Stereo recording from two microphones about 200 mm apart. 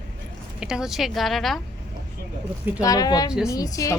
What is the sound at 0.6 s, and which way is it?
Speech, 5° right (ahead or behind).